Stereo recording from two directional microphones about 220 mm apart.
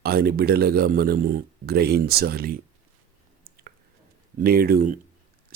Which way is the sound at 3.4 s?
40° right (ahead or behind).